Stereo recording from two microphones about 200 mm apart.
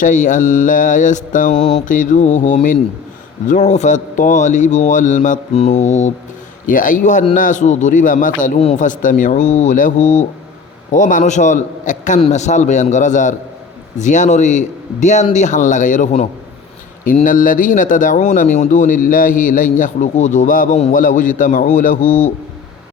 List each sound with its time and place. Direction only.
0.0 s speech: 40° left (ahead or behind)